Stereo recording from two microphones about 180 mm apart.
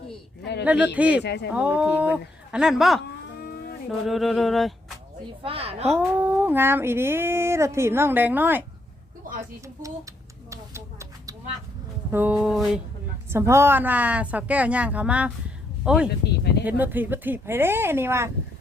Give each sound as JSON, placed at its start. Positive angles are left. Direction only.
{"t": 0.6, "sound": "speech", "side_deg": -5}
{"t": 1.2, "sound": "speech", "side_deg": 70}
{"t": 1.5, "sound": "speech", "side_deg": -5}
{"t": 5.4, "sound": "a woman's voice", "side_deg": -30}
{"t": 5.9, "sound": "speech", "side_deg": -10}
{"t": 9.2, "sound": "a sound", "side_deg": -50}
{"t": 10.5, "sound": "a sound", "side_deg": -15}
{"t": 12.1, "sound": "speech", "side_deg": -5}